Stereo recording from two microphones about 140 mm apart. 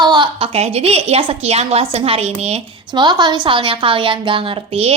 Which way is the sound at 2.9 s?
30° right (ahead or behind).